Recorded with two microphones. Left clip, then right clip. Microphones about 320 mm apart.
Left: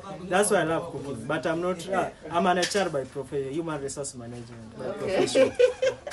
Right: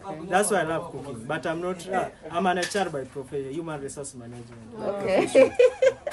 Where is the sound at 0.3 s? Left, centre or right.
Centre.